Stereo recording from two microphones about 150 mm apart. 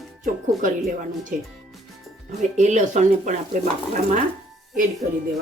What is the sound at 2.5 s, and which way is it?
Speech, 50° right (ahead or behind).